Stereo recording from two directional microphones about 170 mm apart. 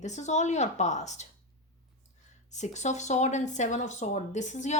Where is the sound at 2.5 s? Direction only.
45° left (ahead or behind).